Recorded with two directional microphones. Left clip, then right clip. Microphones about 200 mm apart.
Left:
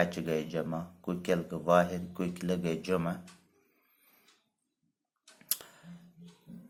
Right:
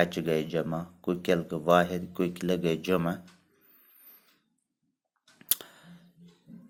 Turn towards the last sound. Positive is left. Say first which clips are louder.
# right 5 dB
turn(degrees=-30)  # may be behind; listen again after turning